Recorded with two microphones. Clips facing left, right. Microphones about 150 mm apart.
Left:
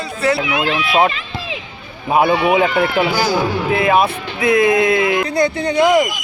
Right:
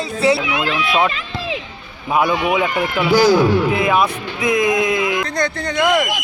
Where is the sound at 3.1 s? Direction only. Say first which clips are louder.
Right 5 dB; 5° left (ahead or behind).